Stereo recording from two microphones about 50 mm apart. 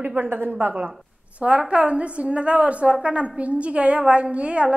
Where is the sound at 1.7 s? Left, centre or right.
Right.